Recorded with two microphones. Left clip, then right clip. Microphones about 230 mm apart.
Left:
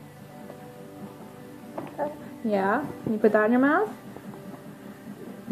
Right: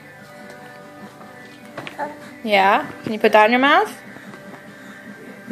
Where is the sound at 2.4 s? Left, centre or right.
Right.